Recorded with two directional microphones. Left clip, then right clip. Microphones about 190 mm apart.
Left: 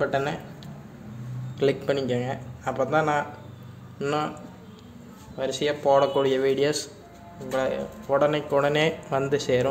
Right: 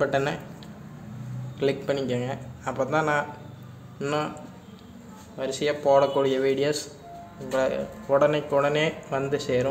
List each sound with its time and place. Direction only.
0.0 s speech: centre (ahead or behind)
1.6 s speech: 15° left (ahead or behind)
5.6 s speech: centre (ahead or behind)
6.2 s speech: 15° left (ahead or behind)
7.4 s speech: centre (ahead or behind)